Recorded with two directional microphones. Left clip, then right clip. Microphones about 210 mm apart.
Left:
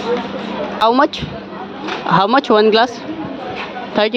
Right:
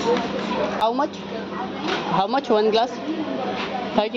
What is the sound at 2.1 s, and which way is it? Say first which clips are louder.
Speech: left 9 dB; 35° left (ahead or behind).